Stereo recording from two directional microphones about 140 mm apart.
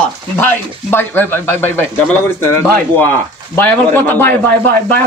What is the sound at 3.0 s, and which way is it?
Speech, 15° left (ahead or behind).